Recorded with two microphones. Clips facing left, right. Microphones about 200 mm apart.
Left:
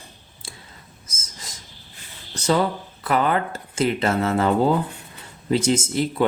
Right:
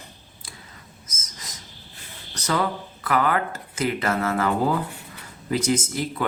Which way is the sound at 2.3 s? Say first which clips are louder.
Left 4 dB; 25° left (ahead or behind).